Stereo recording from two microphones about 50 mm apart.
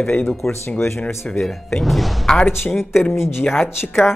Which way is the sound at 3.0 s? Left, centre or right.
Left.